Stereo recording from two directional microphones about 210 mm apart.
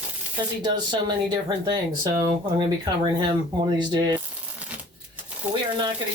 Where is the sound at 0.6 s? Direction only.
20° right (ahead or behind).